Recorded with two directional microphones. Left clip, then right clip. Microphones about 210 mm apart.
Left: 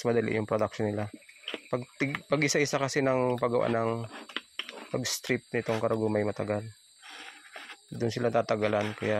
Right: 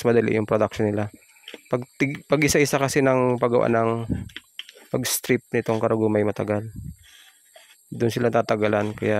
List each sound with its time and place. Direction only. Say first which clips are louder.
0.0 s speech: right 8 dB; 45° right (ahead or behind)
8.0 s speech: right 6 dB; 45° right (ahead or behind)